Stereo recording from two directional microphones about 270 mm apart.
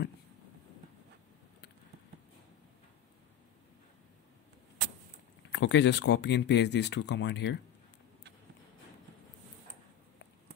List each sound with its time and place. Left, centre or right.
5.5 s speech: left